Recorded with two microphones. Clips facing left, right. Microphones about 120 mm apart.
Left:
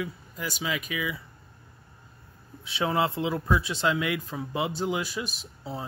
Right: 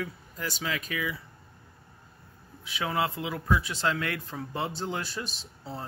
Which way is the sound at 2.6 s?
25° left (ahead or behind).